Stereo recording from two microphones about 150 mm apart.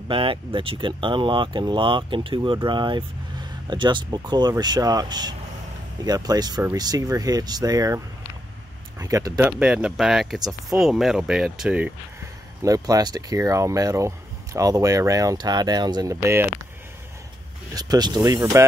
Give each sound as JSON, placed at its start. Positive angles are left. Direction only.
{"t": 0.1, "sound": "speech", "side_deg": -35}
{"t": 9.4, "sound": "speech", "side_deg": -5}
{"t": 12.6, "sound": "speech", "side_deg": -25}
{"t": 17.7, "sound": "speech", "side_deg": -25}